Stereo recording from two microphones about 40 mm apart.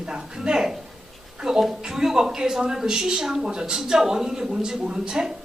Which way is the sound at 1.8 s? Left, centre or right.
Centre.